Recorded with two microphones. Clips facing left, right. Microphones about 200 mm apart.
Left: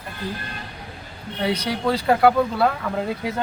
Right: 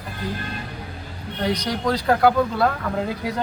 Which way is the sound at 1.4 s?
5° left (ahead or behind).